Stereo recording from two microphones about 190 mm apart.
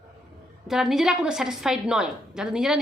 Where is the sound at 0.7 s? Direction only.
Centre (ahead or behind).